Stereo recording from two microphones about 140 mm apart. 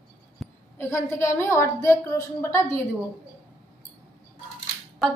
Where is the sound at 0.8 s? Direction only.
20° left (ahead or behind).